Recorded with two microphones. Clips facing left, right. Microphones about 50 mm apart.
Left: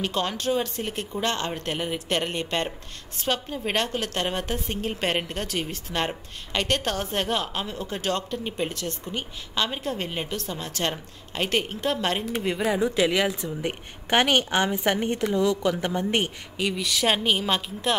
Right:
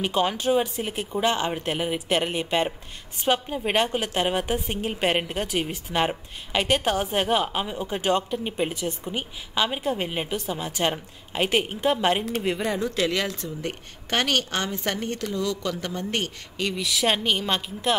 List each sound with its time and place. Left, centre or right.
0.0 s a woman's voice: centre
12.4 s speech: centre
16.6 s speech: centre